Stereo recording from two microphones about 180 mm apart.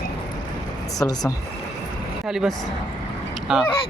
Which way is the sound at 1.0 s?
20° left (ahead or behind).